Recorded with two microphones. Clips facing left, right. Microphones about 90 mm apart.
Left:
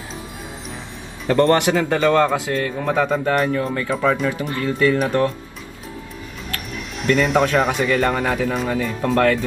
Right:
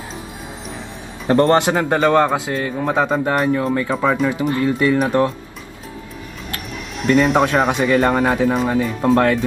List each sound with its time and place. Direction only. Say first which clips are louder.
1.2 s a man's voice: right 2 dB; 30° right (ahead or behind)
7.0 s speech: right 3 dB; centre (ahead or behind)
7.8 s a man's voice: right 3 dB; 35° right (ahead or behind)